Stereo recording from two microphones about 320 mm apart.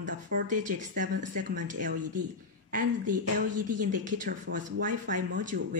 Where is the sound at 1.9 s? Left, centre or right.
Right.